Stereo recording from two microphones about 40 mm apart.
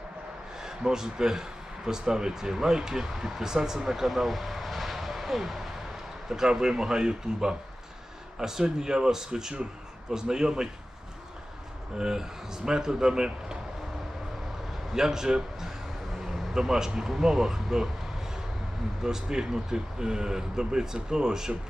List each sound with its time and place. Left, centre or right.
0.6 s speech: centre
11.9 s speech: centre
14.9 s speech: centre
16.6 s speech: centre
19.0 s speech: centre